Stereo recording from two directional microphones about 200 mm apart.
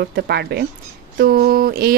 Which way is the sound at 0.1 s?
55° right (ahead or behind).